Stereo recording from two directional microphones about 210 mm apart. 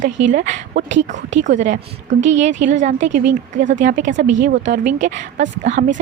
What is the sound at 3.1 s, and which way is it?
Speech, 35° right (ahead or behind).